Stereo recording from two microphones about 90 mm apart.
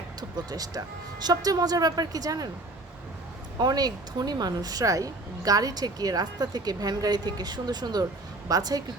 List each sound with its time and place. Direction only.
0.2 s a woman's voice: 45° right (ahead or behind)
3.6 s a woman's voice: 45° right (ahead or behind)